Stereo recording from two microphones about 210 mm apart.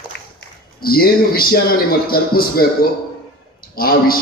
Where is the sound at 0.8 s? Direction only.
45° left (ahead or behind).